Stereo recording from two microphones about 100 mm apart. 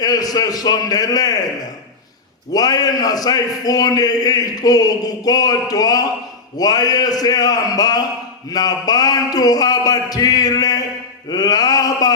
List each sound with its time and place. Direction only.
0.0 s a man's voice: 40° left (ahead or behind)
2.5 s a man's voice: 40° left (ahead or behind)